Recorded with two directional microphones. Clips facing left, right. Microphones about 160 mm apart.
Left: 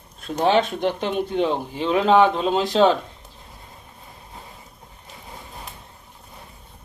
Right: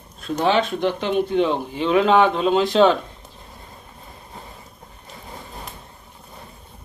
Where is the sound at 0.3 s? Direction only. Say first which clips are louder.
Left 1 dB; 50° left (ahead or behind).